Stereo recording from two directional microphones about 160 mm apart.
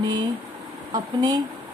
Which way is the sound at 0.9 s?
25° right (ahead or behind).